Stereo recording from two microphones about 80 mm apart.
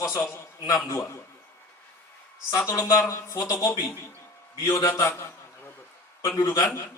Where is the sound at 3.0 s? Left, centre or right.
Left.